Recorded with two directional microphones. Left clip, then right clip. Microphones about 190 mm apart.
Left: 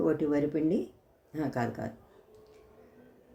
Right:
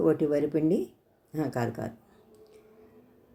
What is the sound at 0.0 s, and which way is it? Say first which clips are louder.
Speech: right 3 dB; 15° right (ahead or behind).